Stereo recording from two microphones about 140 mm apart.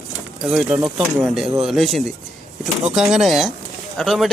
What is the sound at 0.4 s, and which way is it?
A man's voice, 5° right (ahead or behind).